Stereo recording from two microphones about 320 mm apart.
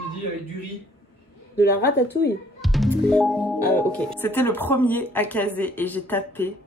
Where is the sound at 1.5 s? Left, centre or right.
Left.